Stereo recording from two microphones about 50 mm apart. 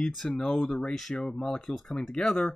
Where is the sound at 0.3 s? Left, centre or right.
Centre.